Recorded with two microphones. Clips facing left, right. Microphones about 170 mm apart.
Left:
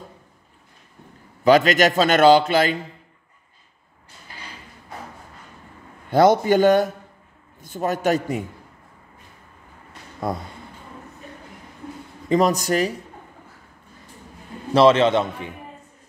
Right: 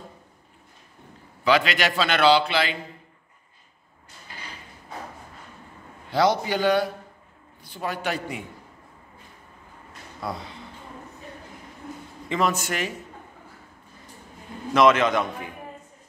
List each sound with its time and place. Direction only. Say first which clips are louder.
1.4 s a man's voice: left 7 dB; 45° left (ahead or behind)
6.0 s a man's voice: left 7 dB; 50° left (ahead or behind)
10.2 s a man's voice: left 6 dB; 50° left (ahead or behind)
12.3 s speech: left 6 dB; 40° left (ahead or behind)
14.7 s a man's voice: left 4 dB; 30° left (ahead or behind)